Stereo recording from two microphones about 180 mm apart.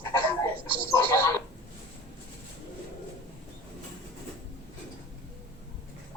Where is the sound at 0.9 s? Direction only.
15° left (ahead or behind).